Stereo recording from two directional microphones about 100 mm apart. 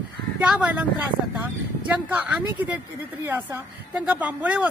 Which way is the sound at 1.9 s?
15° right (ahead or behind).